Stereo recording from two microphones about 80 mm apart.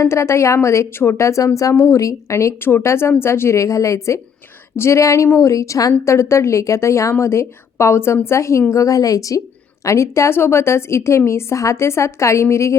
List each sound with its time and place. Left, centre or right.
0.0 s a woman's voice: left